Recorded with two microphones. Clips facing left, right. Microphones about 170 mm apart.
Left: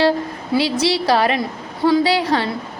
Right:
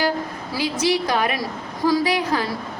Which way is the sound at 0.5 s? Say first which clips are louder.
Left 4 dB; 30° left (ahead or behind).